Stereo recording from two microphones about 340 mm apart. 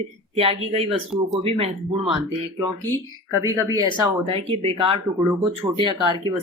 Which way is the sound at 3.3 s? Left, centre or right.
Centre.